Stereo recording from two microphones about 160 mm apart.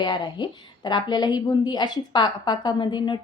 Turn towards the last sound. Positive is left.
turn(degrees=30)  # may be behind; listen again after turning